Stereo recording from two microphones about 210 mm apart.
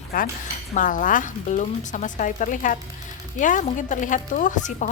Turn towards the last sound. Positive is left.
turn(degrees=35)  # may be behind; listen again after turning